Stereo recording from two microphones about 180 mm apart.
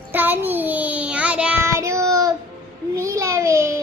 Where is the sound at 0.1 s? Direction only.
10° right (ahead or behind).